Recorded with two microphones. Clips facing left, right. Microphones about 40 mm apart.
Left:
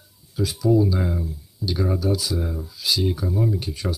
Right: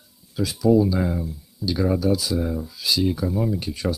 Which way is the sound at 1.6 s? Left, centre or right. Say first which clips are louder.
Right 2 dB; right.